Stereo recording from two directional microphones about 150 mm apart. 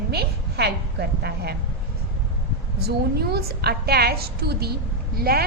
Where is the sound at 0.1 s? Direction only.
90° right.